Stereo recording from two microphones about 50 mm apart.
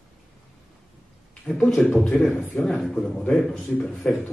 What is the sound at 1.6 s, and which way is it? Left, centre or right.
A man's voice, centre.